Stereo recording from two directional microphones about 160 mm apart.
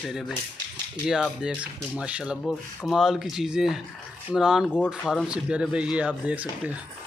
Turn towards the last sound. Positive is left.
turn(degrees=-10)  # may be behind; listen again after turning